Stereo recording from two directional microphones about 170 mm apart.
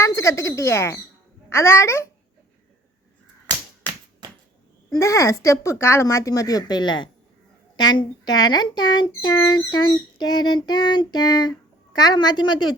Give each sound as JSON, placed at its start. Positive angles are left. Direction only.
{"t": 0.0, "sound": "speech", "side_deg": 15}
{"t": 4.2, "sound": "a sound", "side_deg": -25}
{"t": 4.9, "sound": "speech", "side_deg": 20}